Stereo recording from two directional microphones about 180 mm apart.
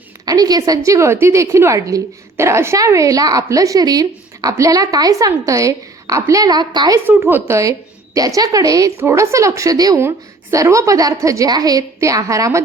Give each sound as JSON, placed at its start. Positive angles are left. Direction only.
{"t": 0.3, "sound": "a woman's voice", "side_deg": -20}